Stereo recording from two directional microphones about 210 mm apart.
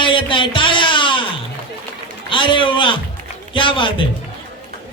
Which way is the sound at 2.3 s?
25° left (ahead or behind).